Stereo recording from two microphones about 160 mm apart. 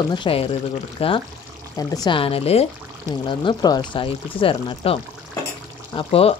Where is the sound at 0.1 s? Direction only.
35° left (ahead or behind).